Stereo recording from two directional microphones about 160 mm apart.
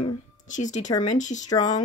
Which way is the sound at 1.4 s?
25° left (ahead or behind).